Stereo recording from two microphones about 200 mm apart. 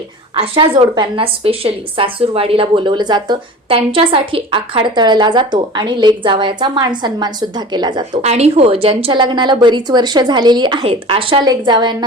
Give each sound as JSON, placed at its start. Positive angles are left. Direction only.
{"t": 0.3, "sound": "a woman's voice", "side_deg": -25}